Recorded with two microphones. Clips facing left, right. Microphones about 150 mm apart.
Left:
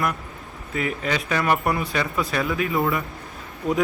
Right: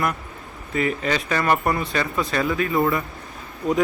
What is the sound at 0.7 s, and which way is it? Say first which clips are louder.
Speech: right 3 dB; centre (ahead or behind).